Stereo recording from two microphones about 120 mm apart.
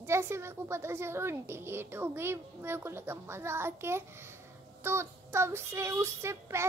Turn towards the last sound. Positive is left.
turn(degrees=-20)  # may be behind; listen again after turning